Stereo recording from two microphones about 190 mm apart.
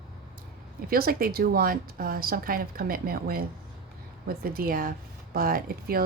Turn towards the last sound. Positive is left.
turn(degrees=-50)  # may be behind; listen again after turning